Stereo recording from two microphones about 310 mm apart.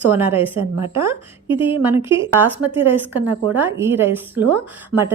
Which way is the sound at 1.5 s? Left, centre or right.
Centre.